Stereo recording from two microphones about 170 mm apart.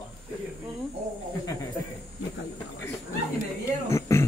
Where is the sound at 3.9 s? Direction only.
15° left (ahead or behind).